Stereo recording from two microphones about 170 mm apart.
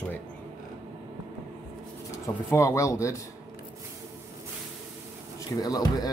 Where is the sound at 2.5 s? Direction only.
15° left (ahead or behind).